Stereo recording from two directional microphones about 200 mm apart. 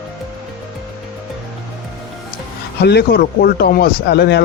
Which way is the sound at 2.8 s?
55° left (ahead or behind).